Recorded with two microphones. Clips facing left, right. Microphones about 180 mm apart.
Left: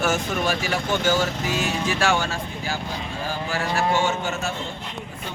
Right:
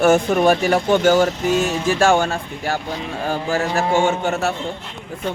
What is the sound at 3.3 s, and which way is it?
Speech, 45° right (ahead or behind).